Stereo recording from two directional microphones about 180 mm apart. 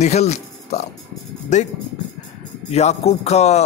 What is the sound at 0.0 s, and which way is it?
Speech, 40° left (ahead or behind).